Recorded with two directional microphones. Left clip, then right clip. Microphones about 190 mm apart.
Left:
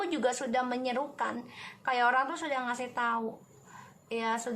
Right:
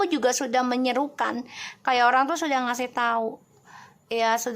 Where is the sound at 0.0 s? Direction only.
45° right (ahead or behind).